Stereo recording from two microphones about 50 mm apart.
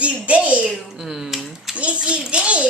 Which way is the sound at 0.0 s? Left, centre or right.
Right.